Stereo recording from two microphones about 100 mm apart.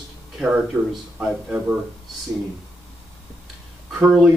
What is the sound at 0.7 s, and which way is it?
A man's voice, 10° right (ahead or behind).